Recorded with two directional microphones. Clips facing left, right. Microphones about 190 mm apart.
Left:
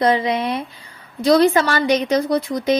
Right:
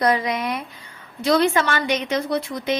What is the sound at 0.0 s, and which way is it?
Speech, 25° left (ahead or behind).